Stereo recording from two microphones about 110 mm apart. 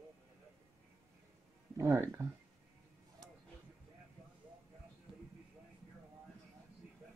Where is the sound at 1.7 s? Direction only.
25° right (ahead or behind).